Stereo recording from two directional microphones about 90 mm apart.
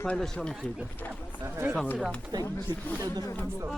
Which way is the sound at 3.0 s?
35° right (ahead or behind).